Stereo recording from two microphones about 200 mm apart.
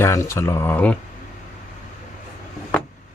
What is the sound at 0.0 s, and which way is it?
Speech, 15° left (ahead or behind).